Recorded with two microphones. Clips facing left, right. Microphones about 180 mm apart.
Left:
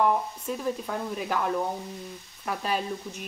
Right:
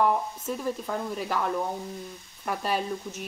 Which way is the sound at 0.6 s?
Centre (ahead or behind).